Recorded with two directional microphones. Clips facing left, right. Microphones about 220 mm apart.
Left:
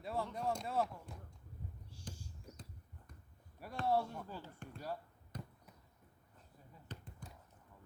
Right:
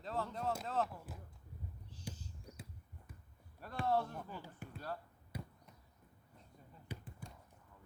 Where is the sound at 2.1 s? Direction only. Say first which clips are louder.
Even; 10° left (ahead or behind).